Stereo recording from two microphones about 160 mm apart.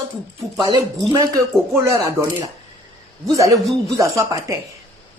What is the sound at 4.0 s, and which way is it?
Speech, 20° right (ahead or behind).